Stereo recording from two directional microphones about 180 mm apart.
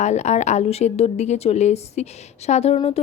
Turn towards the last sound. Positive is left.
turn(degrees=35)  # may be behind; listen again after turning